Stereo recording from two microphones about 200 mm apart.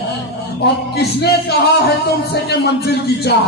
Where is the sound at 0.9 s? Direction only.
55° left (ahead or behind).